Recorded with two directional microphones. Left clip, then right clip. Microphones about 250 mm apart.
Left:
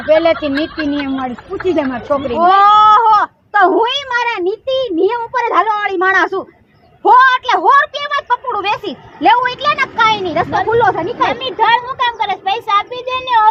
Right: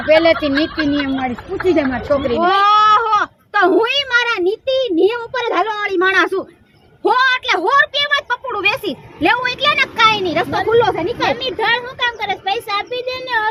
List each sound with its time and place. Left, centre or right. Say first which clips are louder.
0.0 s speech: even; centre
2.4 s speech: left 5 dB; right
7.7 s a woman's voice: left 2 dB; right